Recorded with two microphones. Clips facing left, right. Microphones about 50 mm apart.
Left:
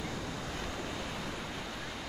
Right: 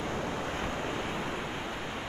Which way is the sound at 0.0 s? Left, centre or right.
Right.